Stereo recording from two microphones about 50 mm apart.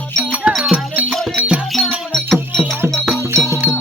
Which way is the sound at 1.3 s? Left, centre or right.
Right.